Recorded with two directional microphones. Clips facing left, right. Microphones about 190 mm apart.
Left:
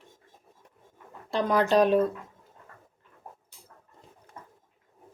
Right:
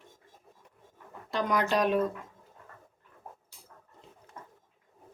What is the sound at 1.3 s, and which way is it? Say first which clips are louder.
Speech: left 5 dB; 30° left (ahead or behind).